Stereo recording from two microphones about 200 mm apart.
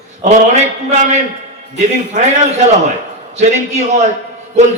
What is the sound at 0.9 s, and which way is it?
Speech, 40° right (ahead or behind).